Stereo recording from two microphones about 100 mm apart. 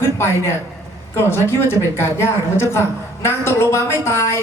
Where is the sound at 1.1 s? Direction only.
25° left (ahead or behind).